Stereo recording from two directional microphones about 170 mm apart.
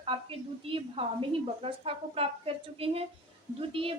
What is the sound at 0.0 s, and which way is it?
A woman's voice, 35° right (ahead or behind).